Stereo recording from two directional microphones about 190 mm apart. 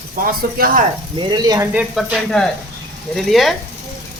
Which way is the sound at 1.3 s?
20° right (ahead or behind).